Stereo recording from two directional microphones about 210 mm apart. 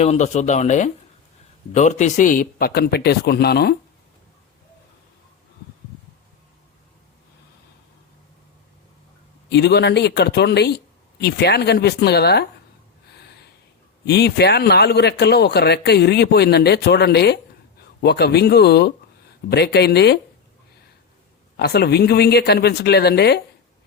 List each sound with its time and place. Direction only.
0.0 s a man's voice: 35° left (ahead or behind); by 3.8 s 50° left (ahead or behind)
9.5 s a man's voice: 55° left (ahead or behind)
13.1 s a sound: 50° left (ahead or behind)
14.0 s a man's voice: 50° left (ahead or behind)
21.6 s a man's voice: 50° left (ahead or behind)